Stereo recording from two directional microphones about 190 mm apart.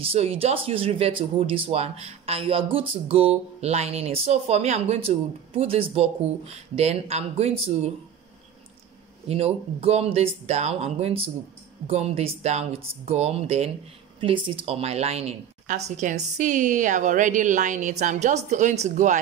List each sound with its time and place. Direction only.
0.0 s speech: 30° right (ahead or behind)
9.3 s speech: 30° right (ahead or behind)